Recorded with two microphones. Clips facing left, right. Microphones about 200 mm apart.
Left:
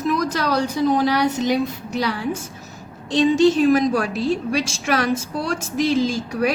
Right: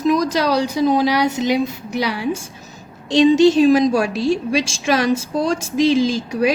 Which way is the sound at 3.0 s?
75° right (ahead or behind).